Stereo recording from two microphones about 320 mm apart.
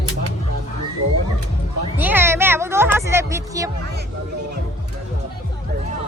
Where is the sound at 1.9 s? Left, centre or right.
Centre.